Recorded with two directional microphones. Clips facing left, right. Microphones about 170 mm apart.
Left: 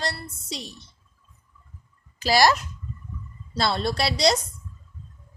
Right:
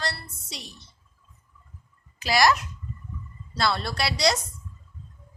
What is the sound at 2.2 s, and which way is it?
A child's voice, 30° left (ahead or behind).